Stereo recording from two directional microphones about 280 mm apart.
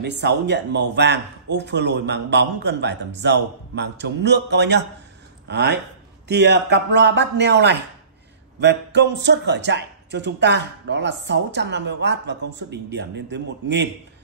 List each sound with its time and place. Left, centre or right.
0.0 s speech: right